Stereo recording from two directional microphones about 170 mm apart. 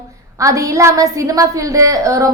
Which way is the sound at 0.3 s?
20° right (ahead or behind).